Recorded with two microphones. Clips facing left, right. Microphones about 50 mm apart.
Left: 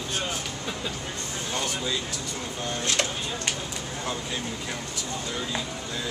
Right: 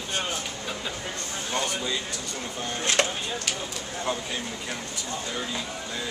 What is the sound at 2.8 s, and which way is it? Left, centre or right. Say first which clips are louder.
Speech: right 3 dB; right.